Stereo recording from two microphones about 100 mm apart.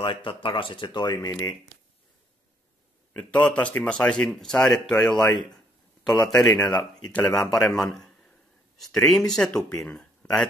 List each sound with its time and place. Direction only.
0.0 s speech: 60° left (ahead or behind); by 1.6 s 40° left (ahead or behind)
3.1 s a man's voice: 15° left (ahead or behind)